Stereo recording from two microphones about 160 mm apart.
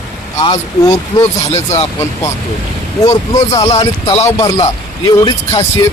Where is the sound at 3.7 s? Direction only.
40° left (ahead or behind).